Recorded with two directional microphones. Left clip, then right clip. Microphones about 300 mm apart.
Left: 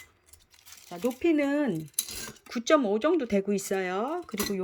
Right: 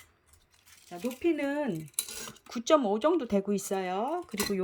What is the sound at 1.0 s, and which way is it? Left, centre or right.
Speech, centre.